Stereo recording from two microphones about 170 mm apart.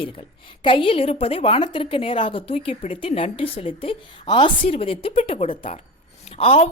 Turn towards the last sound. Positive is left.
turn(degrees=35)  # may be behind; listen again after turning